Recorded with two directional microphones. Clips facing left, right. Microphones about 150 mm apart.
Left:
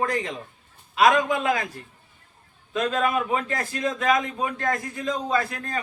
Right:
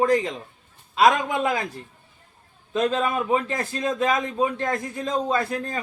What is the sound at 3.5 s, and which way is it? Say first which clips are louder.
A man's voice: right 1 dB; 25° right (ahead or behind).